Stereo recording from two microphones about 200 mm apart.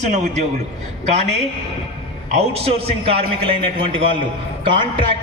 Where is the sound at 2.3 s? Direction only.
30° right (ahead or behind).